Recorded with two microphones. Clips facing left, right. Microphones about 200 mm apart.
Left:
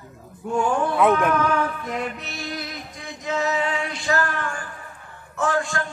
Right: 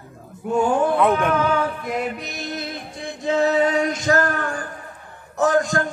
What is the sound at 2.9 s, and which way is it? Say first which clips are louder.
Male singing: right 6 dB; 30° right (ahead or behind).